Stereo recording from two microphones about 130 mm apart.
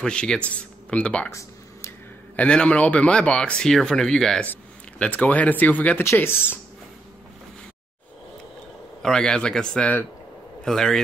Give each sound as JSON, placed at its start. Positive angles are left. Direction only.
{"t": 0.0, "sound": "speech", "side_deg": 5}
{"t": 1.3, "sound": "a sound", "side_deg": 20}
{"t": 2.3, "sound": "speech", "side_deg": 10}
{"t": 9.0, "sound": "a man's voice", "side_deg": 5}